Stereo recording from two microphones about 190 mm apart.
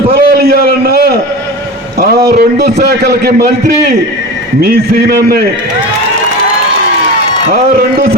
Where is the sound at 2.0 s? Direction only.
55° right (ahead or behind).